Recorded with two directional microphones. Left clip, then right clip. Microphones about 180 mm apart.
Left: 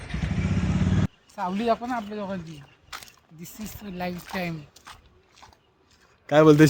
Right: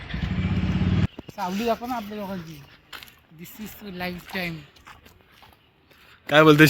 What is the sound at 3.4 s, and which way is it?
Speech, 80° left.